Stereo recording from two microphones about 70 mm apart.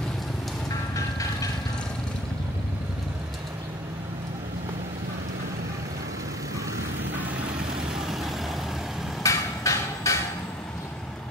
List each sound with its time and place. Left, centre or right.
7.9 s vehicle: centre
9.2 s hammer: left